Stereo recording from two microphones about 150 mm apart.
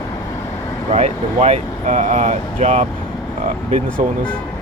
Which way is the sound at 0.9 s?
50° right (ahead or behind).